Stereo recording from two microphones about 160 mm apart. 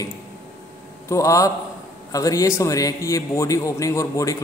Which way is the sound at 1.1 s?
20° left (ahead or behind).